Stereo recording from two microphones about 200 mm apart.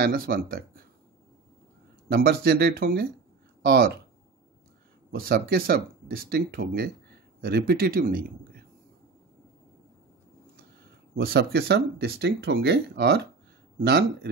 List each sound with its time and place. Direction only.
0.0 s speech: 45° right (ahead or behind)
2.0 s speech: 50° right (ahead or behind)
5.1 s speech: 50° right (ahead or behind)
11.1 s speech: 55° right (ahead or behind)